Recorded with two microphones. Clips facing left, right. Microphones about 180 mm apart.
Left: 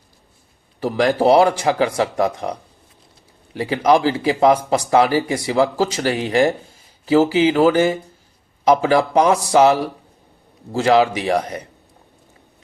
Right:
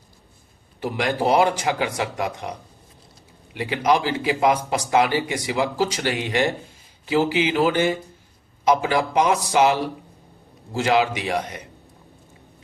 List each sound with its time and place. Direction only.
0.8 s speech: 35° left (ahead or behind)
10.8 s speech: 35° left (ahead or behind)